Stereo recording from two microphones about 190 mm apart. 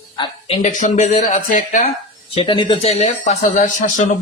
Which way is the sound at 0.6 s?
40° left (ahead or behind).